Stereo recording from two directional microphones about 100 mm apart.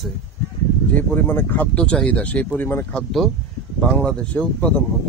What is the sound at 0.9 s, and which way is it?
Speech, 20° left (ahead or behind).